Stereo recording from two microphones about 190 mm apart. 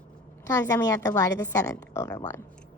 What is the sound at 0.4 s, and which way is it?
A woman's voice, 15° left (ahead or behind).